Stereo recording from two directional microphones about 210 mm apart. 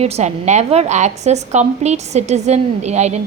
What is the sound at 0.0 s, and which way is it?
A woman's voice, 30° right (ahead or behind).